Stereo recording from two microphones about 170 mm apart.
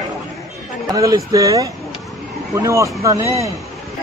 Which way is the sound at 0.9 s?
20° right (ahead or behind).